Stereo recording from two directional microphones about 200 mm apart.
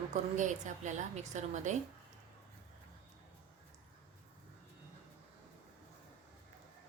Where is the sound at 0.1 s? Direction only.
40° right (ahead or behind).